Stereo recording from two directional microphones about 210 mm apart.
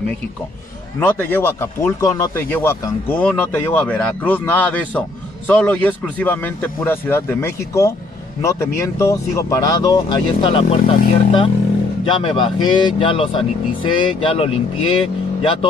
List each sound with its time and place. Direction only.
0.9 s speech: 10° left (ahead or behind); by 14.6 s 25° left (ahead or behind)